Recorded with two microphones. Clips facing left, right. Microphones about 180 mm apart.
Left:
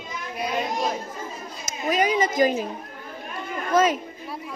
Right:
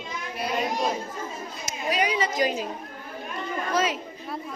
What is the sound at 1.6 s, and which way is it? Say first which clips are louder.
A woman's voice: left 3 dB; 45° left (ahead or behind).